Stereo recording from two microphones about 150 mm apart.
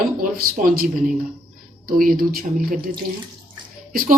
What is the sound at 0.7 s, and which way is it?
A woman's voice, 75° right (ahead or behind).